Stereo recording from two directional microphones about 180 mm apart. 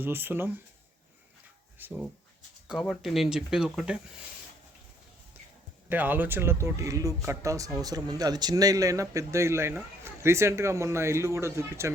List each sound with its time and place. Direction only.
0.0 s speech: 10° right (ahead or behind)
1.8 s speech: 10° right (ahead or behind)
2.6 s speech: centre (ahead or behind)
5.9 s speech: 10° right (ahead or behind)